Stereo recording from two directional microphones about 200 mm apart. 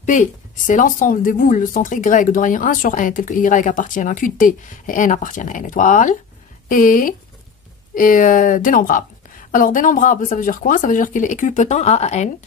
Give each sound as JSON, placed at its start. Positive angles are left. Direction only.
{"t": 0.0, "sound": "a woman's voice", "side_deg": 40}